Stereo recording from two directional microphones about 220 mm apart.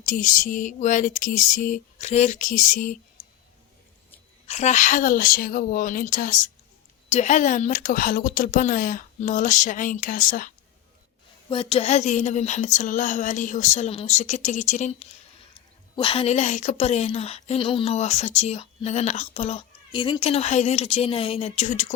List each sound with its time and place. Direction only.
0.0 s speech: 35° left (ahead or behind)
4.4 s speech: 30° left (ahead or behind)
11.4 s a woman's voice: 25° left (ahead or behind)